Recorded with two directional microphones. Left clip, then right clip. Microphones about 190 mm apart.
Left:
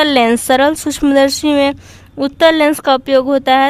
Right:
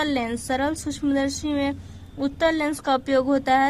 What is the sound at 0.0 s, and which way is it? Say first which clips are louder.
A woman's voice: left 14 dB; 35° left (ahead or behind).